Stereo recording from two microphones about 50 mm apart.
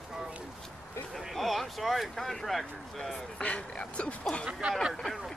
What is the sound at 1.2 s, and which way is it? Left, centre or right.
Speech, centre.